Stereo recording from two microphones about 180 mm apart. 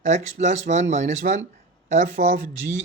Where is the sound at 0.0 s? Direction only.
40° right (ahead or behind).